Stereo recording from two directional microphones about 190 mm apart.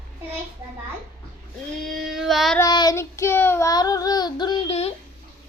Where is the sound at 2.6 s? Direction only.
20° left (ahead or behind).